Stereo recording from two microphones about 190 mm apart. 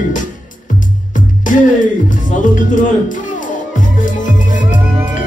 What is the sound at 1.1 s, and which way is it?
Music, 40° left (ahead or behind).